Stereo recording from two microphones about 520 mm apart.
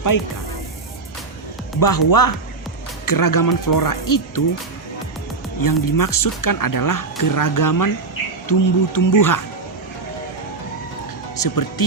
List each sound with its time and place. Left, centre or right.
1.8 s speech: left
5.6 s speech: left
11.3 s speech: left